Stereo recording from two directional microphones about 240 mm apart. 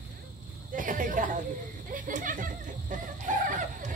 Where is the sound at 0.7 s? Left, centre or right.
Right.